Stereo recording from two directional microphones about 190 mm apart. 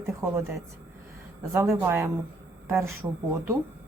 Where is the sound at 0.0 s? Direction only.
15° right (ahead or behind).